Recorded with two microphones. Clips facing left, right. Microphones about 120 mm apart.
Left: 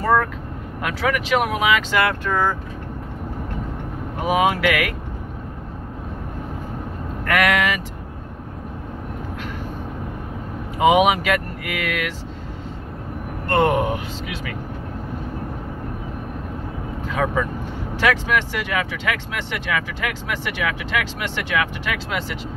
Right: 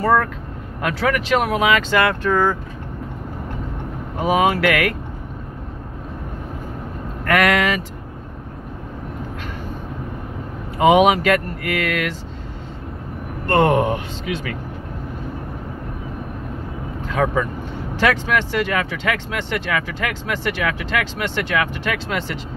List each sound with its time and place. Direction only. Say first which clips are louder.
0.0 s speech: right 1 dB; centre (ahead or behind)
4.2 s speech: right 2 dB; 5° left (ahead or behind)
7.2 s speech: right 2 dB; 5° left (ahead or behind)
10.8 s speech: right 2 dB; 10° left (ahead or behind)
13.5 s speech: right 2 dB; 5° left (ahead or behind)
17.1 s speech: right 2 dB; 5° left (ahead or behind)